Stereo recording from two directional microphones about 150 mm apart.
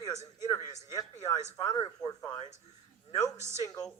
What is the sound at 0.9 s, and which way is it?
A man's voice, 25° left (ahead or behind).